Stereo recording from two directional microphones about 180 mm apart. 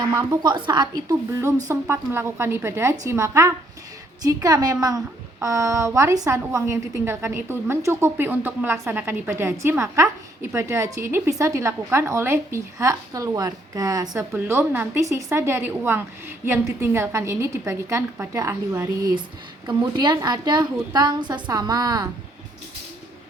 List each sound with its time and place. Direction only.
0.0 s a woman's voice: 20° right (ahead or behind)